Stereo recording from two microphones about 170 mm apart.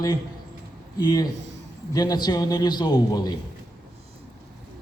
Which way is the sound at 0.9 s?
25° left (ahead or behind).